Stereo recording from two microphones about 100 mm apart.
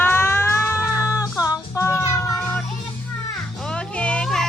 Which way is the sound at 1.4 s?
30° left (ahead or behind).